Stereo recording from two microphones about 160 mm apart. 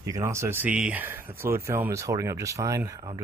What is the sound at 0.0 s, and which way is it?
Speech, 20° right (ahead or behind).